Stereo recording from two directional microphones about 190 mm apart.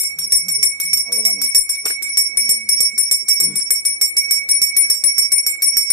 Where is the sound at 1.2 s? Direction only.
25° left (ahead or behind).